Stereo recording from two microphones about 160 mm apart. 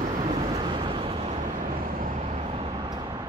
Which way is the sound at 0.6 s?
35° right (ahead or behind).